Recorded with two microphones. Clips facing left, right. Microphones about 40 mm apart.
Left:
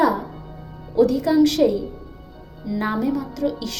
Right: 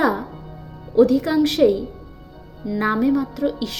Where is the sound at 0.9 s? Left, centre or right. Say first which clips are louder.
Right 2 dB; right.